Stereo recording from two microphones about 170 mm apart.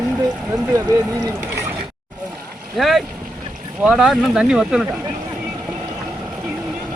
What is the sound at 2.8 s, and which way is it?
Speech, centre (ahead or behind).